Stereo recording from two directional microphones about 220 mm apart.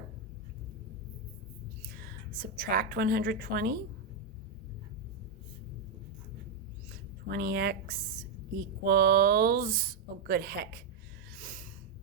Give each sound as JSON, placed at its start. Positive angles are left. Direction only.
{"t": 2.0, "sound": "a woman's voice", "side_deg": -40}
{"t": 7.3, "sound": "speech", "side_deg": -45}
{"t": 11.3, "sound": "snort", "side_deg": -40}